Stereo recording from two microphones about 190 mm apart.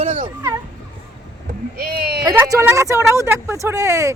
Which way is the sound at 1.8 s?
55° right (ahead or behind).